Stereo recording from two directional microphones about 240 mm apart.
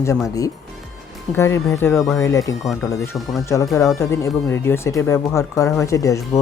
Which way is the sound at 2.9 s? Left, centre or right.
Centre.